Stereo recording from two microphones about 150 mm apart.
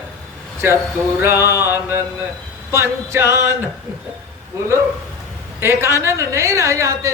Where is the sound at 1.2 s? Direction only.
15° right (ahead or behind).